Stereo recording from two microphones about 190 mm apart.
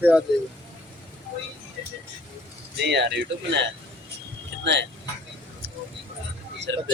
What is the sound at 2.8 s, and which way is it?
Speech, 65° right (ahead or behind).